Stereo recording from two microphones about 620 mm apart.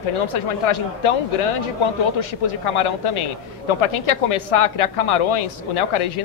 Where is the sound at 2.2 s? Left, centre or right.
Left.